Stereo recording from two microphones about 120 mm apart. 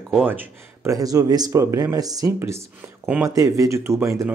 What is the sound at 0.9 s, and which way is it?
Speech, 30° right (ahead or behind).